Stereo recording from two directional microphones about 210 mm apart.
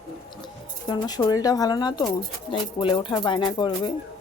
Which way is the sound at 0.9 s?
20° left (ahead or behind).